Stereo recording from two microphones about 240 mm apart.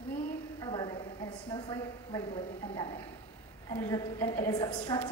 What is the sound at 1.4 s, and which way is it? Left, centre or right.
A woman's voice, centre.